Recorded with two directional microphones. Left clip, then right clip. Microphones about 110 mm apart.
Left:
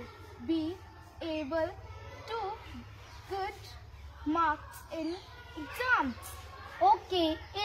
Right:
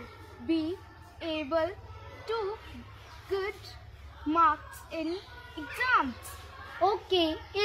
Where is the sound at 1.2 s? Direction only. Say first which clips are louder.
Right 3 dB; 35° left (ahead or behind).